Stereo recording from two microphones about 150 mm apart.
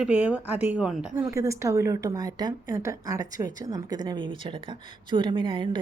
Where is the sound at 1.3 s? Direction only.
20° right (ahead or behind).